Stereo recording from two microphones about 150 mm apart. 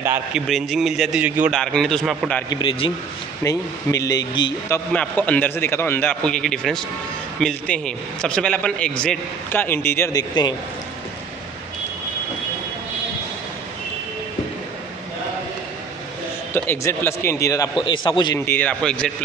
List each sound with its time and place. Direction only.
0.3 s a man's voice: centre (ahead or behind)
1.5 s a man's voice: 5° left (ahead or behind)
2.5 s a man's voice: 35° left (ahead or behind)
3.4 s speech: 20° left (ahead or behind)
4.9 s a man's voice: 10° left (ahead or behind)
16.5 s a man's voice: 15° left (ahead or behind)
17.7 s a man's voice: 35° left (ahead or behind)
18.4 s a man's voice: 10° left (ahead or behind)